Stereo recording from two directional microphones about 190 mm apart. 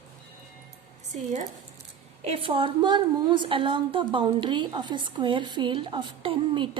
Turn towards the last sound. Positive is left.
turn(degrees=-30)  # may be behind; listen again after turning